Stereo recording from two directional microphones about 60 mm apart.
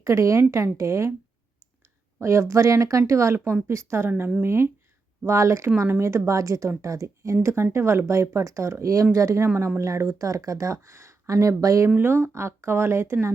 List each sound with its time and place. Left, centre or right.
0.0 s speech: right
2.2 s speech: right
11.9 s speech: right